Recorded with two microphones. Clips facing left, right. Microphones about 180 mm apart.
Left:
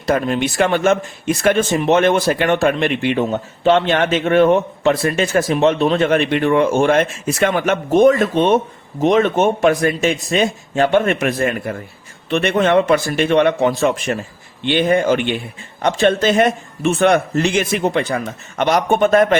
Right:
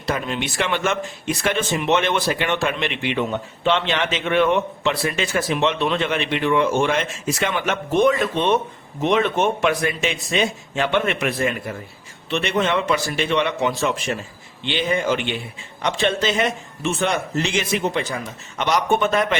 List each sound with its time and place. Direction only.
0.0 s speech: 45° left (ahead or behind)